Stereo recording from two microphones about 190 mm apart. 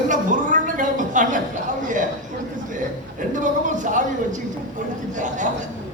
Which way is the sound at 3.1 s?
40° right (ahead or behind).